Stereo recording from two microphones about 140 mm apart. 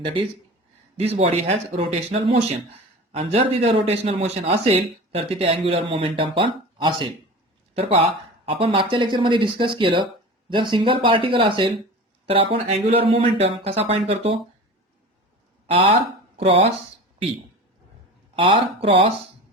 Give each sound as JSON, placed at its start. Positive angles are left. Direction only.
{"t": 0.9, "sound": "speech", "side_deg": -45}
{"t": 15.6, "sound": "speech", "side_deg": -45}
{"t": 18.3, "sound": "speech", "side_deg": -40}